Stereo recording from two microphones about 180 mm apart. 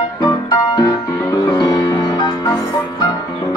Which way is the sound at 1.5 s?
25° left (ahead or behind).